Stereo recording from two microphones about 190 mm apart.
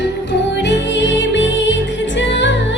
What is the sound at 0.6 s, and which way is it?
Music, 65° left (ahead or behind).